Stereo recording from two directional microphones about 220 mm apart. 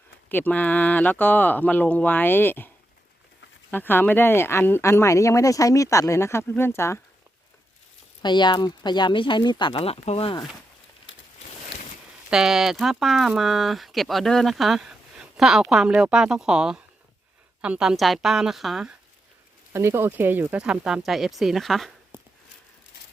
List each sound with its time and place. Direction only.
0.3 s speech: 10° left (ahead or behind)
3.7 s speech: 10° left (ahead or behind)
8.2 s speech: 20° left (ahead or behind)
11.1 s a sound: 60° left (ahead or behind)
12.3 s speech: centre (ahead or behind)
22.1 s a sound: 10° right (ahead or behind)